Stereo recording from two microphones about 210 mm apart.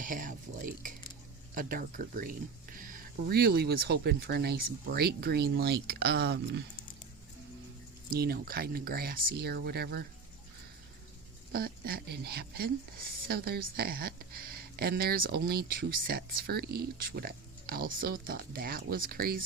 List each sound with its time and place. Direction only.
0.0 s a woman's voice: 40° right (ahead or behind)
8.1 s a woman's voice: 45° right (ahead or behind)
11.5 s a woman's voice: 45° right (ahead or behind)